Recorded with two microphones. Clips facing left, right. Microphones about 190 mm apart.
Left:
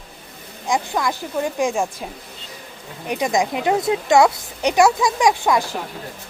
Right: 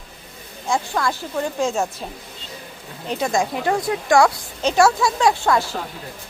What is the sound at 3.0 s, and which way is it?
A woman's voice, 15° left (ahead or behind).